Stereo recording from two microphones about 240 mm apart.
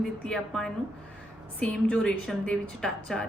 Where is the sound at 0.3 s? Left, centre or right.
Centre.